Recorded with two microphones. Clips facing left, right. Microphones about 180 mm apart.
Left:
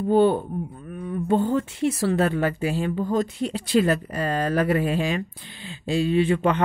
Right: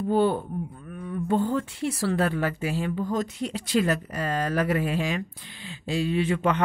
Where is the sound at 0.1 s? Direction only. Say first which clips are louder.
Left 5 dB; 25° left (ahead or behind).